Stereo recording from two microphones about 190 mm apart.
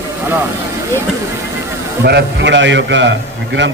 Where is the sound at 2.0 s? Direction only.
60° right (ahead or behind).